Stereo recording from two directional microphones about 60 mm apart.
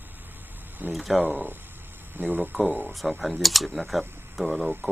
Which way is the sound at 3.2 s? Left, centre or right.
Centre.